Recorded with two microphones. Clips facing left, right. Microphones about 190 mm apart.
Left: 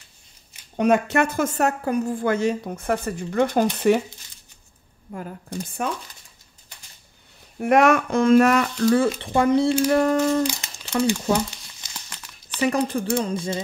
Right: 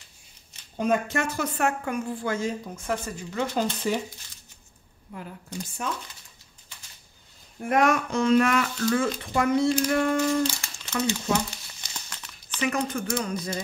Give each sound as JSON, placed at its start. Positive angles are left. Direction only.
{"t": 0.7, "sound": "speech", "side_deg": 70}
{"t": 2.1, "sound": "a woman's voice", "side_deg": 60}
{"t": 5.1, "sound": "a woman's voice", "side_deg": 50}
{"t": 7.6, "sound": "speech", "side_deg": 70}
{"t": 10.6, "sound": "a sound", "side_deg": 20}
{"t": 12.1, "sound": "crumpling", "side_deg": 10}
{"t": 12.5, "sound": "speech", "side_deg": 35}